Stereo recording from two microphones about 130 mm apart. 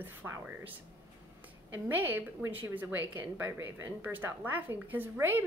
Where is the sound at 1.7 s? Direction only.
15° right (ahead or behind).